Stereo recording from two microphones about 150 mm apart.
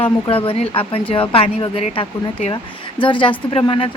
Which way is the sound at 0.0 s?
40° left (ahead or behind).